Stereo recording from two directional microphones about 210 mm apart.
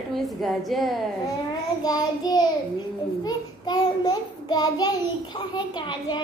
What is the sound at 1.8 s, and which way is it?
A child's voice, 20° left (ahead or behind).